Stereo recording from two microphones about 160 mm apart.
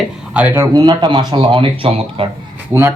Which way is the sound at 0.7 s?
25° right (ahead or behind).